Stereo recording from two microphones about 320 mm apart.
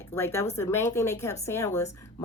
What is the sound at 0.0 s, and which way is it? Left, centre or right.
A woman's voice, centre.